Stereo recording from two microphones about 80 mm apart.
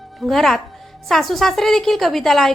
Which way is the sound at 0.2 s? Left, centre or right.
Centre.